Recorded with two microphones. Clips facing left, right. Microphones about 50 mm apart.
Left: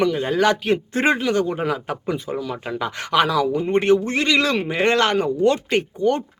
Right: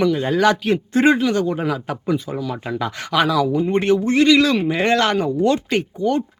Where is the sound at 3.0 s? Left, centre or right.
Left.